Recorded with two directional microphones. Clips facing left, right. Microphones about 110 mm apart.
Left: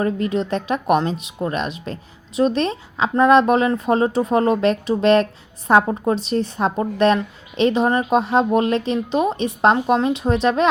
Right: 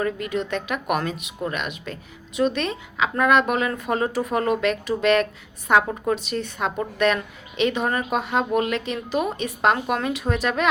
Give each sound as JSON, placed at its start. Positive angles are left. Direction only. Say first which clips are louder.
{"t": 0.0, "sound": "speech", "louder": "left 5 dB", "side_deg": 35}